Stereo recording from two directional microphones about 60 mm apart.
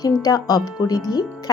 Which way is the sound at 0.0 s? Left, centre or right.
Left.